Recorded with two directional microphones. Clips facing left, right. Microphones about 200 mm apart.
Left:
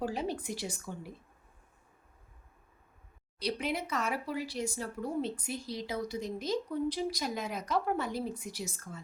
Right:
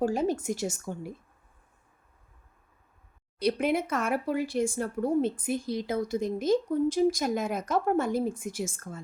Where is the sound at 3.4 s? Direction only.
55° right (ahead or behind).